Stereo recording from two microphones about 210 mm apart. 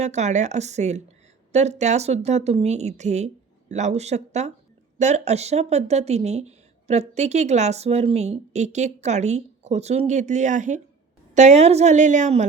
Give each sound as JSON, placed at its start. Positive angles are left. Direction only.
{"t": 0.0, "sound": "speech", "side_deg": -35}